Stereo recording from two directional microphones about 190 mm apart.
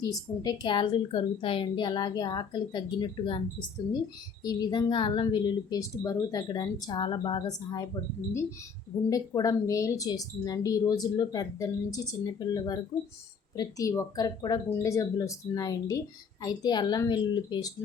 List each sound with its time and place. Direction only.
0.0 s a woman's voice: 20° left (ahead or behind)
4.4 s a woman's voice: 20° left (ahead or behind)
9.0 s a woman's voice: 20° left (ahead or behind)